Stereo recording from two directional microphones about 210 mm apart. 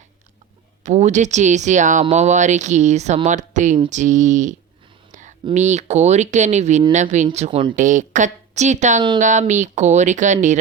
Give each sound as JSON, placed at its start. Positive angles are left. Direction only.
{"t": 0.9, "sound": "speech", "side_deg": -35}
{"t": 7.8, "sound": "speech", "side_deg": -35}